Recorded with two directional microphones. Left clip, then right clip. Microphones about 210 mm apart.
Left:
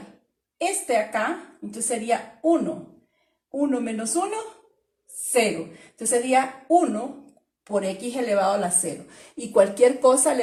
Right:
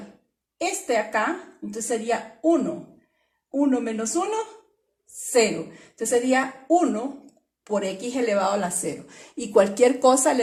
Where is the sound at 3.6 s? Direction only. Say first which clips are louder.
Right 2 dB; 35° right (ahead or behind).